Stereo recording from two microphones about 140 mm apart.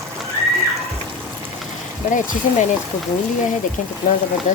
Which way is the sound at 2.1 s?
65° left (ahead or behind).